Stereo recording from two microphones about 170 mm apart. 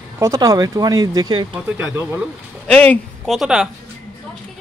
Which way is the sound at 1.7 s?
10° right (ahead or behind).